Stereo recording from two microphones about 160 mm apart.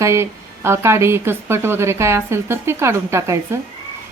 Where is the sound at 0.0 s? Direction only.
15° right (ahead or behind).